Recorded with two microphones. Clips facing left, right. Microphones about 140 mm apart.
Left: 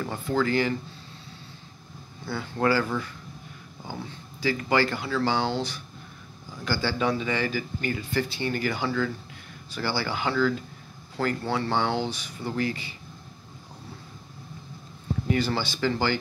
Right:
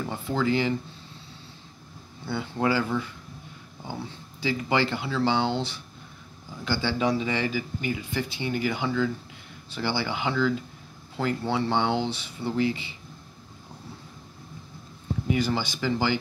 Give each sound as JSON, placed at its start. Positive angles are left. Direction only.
{"t": 0.0, "sound": "speech", "side_deg": -20}
{"t": 2.2, "sound": "speech", "side_deg": -15}
{"t": 4.4, "sound": "speech", "side_deg": -20}
{"t": 7.5, "sound": "speech", "side_deg": -15}
{"t": 15.2, "sound": "speech", "side_deg": -15}